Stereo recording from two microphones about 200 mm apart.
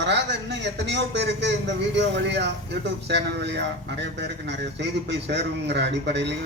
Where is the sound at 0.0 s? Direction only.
60° right (ahead or behind).